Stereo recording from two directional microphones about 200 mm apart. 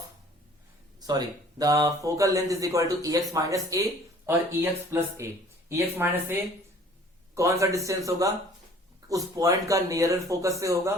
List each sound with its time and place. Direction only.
0.9 s speech: 20° right (ahead or behind)
7.3 s speech: 15° right (ahead or behind)